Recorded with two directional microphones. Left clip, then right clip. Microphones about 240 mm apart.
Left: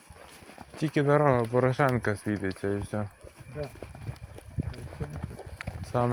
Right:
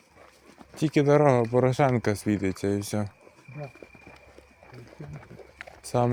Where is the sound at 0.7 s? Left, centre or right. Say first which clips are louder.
Right 3 dB; right.